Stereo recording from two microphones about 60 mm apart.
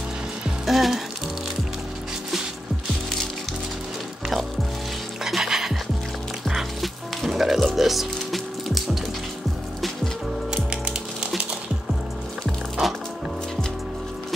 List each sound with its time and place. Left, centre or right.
0.7 s music: centre
5.2 s music: centre
10.5 s music: centre